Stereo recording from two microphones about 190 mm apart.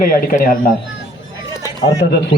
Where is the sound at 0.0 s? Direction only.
45° left (ahead or behind).